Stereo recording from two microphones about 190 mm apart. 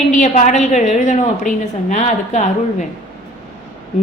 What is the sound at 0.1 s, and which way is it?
Speech, 40° left (ahead or behind).